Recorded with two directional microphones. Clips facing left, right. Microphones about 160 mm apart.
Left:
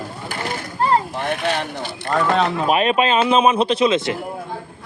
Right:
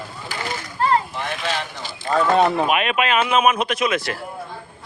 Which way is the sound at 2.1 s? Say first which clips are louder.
Right 2 dB; 15° right (ahead or behind).